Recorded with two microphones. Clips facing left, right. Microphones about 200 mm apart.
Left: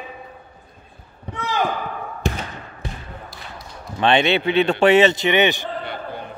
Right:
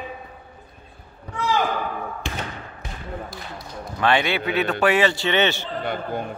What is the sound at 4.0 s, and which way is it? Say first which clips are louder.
A man's voice: left 4 dB; 25° left (ahead or behind).